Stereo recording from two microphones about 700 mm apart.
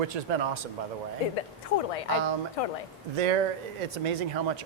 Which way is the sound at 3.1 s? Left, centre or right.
Right.